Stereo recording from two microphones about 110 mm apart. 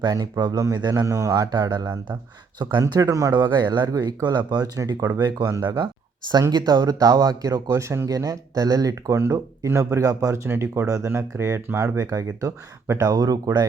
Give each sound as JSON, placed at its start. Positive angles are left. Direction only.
{"t": 0.0, "sound": "speech", "side_deg": -40}